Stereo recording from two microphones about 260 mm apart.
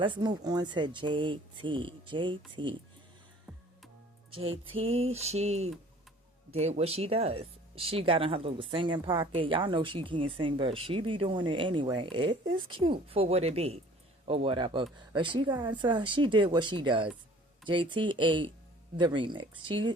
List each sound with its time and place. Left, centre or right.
0.0 s speech: centre
4.9 s speech: right